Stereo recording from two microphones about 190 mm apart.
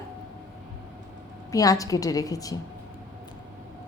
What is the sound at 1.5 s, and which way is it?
A woman's voice, 20° left (ahead or behind).